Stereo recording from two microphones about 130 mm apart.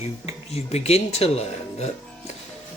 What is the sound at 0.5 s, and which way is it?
Speech, 55° left (ahead or behind).